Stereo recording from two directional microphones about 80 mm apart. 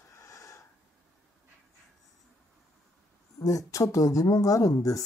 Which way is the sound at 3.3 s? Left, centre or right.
Left.